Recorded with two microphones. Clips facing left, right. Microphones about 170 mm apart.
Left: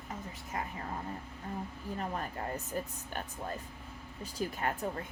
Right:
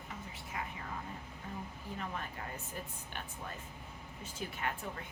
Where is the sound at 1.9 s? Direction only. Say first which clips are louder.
Left 5 dB; 40° left (ahead or behind).